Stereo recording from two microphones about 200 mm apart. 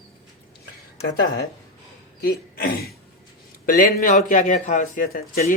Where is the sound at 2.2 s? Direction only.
50° left (ahead or behind).